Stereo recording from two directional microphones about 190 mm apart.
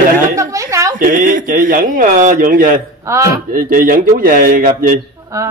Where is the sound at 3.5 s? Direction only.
45° right (ahead or behind).